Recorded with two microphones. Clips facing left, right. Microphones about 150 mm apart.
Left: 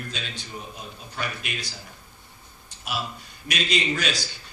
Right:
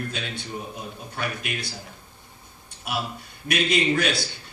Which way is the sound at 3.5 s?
60° right (ahead or behind).